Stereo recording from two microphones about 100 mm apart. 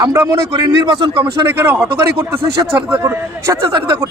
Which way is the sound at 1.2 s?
20° right (ahead or behind).